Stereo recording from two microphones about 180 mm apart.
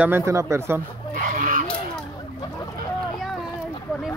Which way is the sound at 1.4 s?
50° right (ahead or behind).